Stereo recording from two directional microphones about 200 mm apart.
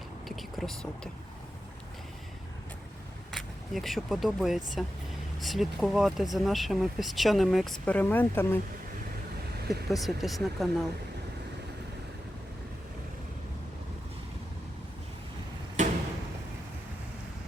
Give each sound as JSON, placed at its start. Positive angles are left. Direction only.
{"t": 0.3, "sound": "speech", "side_deg": 0}
{"t": 3.3, "sound": "speech", "side_deg": 0}
{"t": 9.9, "sound": "speech", "side_deg": 0}
{"t": 15.8, "sound": "a sound", "side_deg": -40}